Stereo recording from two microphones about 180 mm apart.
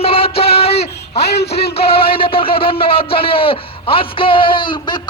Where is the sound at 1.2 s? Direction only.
65° left (ahead or behind).